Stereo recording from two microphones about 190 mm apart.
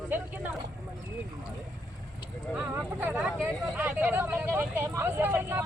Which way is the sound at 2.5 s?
5° right (ahead or behind).